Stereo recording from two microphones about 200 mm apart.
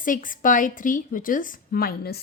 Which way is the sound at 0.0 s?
40° left (ahead or behind).